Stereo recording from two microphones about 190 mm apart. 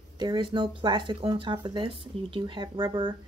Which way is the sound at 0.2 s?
25° right (ahead or behind).